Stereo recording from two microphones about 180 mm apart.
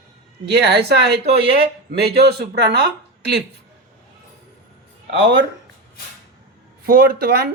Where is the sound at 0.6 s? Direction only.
65° right (ahead or behind).